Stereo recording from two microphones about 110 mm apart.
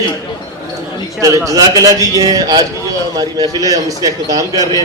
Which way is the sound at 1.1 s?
30° right (ahead or behind).